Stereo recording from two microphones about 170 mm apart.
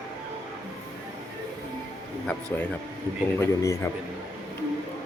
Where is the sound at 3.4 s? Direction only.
20° left (ahead or behind).